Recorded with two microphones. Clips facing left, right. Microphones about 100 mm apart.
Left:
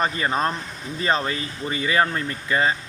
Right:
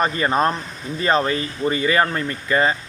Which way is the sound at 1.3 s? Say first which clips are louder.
Right 6 dB; 40° right (ahead or behind).